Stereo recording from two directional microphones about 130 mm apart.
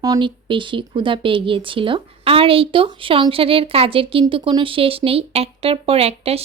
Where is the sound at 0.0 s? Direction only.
35° right (ahead or behind).